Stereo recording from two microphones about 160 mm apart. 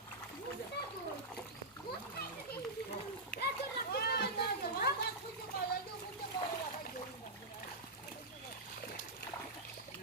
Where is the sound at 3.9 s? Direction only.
80° left.